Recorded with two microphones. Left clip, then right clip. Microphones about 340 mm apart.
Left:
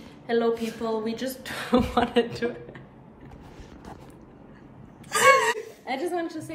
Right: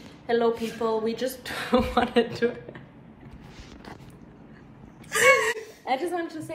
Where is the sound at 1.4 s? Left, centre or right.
Centre.